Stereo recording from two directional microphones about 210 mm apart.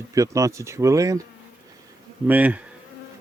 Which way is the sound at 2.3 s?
5° right (ahead or behind).